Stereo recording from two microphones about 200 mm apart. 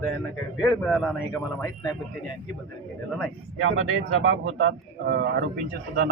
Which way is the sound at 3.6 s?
75° right (ahead or behind).